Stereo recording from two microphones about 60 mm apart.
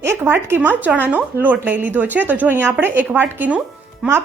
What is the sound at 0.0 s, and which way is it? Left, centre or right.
A woman's voice, right.